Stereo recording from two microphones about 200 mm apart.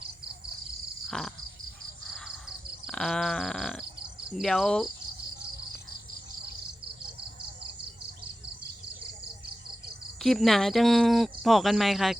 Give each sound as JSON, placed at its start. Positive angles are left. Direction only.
{"t": 1.0, "sound": "a sound", "side_deg": 0}
{"t": 2.0, "sound": "grunt", "side_deg": 0}
{"t": 4.3, "sound": "speech", "side_deg": 0}
{"t": 10.2, "sound": "speech", "side_deg": 0}